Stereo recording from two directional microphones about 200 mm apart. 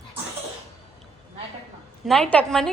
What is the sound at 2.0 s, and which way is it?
Speech, centre (ahead or behind).